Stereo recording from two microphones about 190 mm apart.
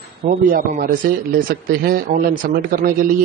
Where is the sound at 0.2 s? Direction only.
50° right (ahead or behind).